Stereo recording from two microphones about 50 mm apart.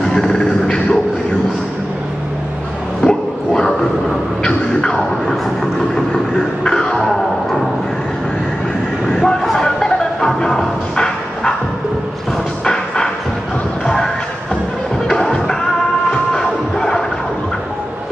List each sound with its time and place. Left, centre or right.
0.0 s music: centre
3.0 s a sound: centre
4.5 s music: centre
6.3 s music: centre
9.2 s vehicle: centre
9.8 s music: centre
12.6 s music: centre